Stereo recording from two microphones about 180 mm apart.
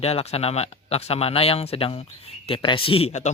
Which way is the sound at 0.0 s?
35° left (ahead or behind).